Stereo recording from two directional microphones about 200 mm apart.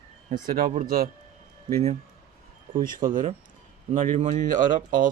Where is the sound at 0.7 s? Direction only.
40° right (ahead or behind).